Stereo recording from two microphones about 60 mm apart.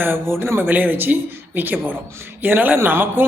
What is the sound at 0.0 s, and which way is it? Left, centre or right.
Speech, right.